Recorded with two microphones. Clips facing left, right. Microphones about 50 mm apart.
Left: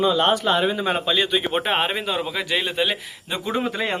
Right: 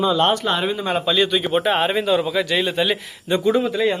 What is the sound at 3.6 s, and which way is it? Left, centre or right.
Speech, left.